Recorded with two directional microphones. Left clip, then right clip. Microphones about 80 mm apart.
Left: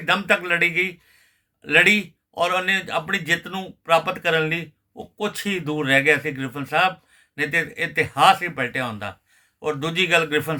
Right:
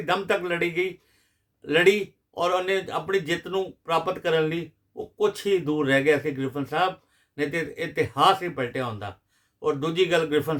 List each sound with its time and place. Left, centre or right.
0.0 s a man's voice: right